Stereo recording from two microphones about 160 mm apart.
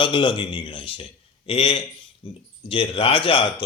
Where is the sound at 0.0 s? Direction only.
30° left (ahead or behind).